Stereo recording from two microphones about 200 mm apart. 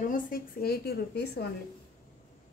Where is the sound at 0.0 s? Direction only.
45° left (ahead or behind).